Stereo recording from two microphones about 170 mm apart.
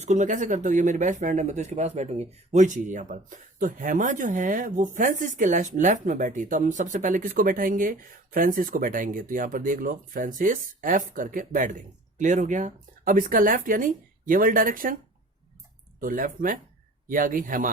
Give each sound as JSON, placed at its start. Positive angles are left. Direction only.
{"t": 0.0, "sound": "speech", "side_deg": -45}
{"t": 16.0, "sound": "speech", "side_deg": -55}